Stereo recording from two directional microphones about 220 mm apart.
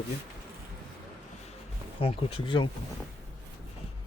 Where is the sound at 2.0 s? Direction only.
25° left (ahead or behind).